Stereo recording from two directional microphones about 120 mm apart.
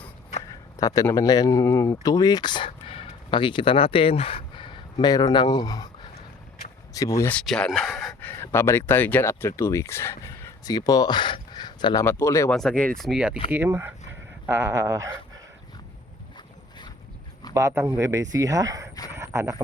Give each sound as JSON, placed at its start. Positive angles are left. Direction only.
{"t": 0.4, "sound": "a sound", "side_deg": 30}
{"t": 1.1, "sound": "speech", "side_deg": 30}
{"t": 7.2, "sound": "speech", "side_deg": 15}
{"t": 7.4, "sound": "speech", "side_deg": 0}
{"t": 8.2, "sound": "speech", "side_deg": 20}
{"t": 10.6, "sound": "speech", "side_deg": 35}
{"t": 12.0, "sound": "speech", "side_deg": 25}
{"t": 12.5, "sound": "speech", "side_deg": 5}
{"t": 13.1, "sound": "speech", "side_deg": -10}
{"t": 17.5, "sound": "speech", "side_deg": -25}
{"t": 19.1, "sound": "a sound", "side_deg": -25}